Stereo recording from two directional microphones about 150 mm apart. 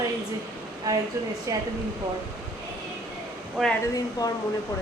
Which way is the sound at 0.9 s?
20° right (ahead or behind).